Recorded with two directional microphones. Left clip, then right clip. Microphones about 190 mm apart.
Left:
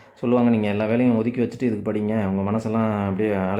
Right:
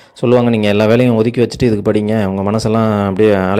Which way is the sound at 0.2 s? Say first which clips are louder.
Right 9 dB; 35° right (ahead or behind).